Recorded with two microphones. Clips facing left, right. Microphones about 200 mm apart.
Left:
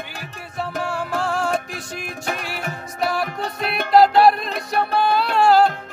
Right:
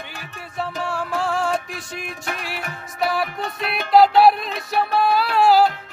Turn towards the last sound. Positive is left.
turn(degrees=0)  # may be behind; listen again after turning